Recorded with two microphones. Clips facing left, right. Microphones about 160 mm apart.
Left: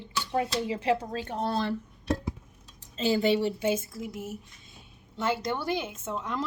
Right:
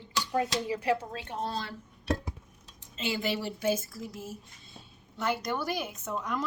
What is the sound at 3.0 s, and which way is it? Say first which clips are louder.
A woman's voice: left 7 dB; 35° left (ahead or behind).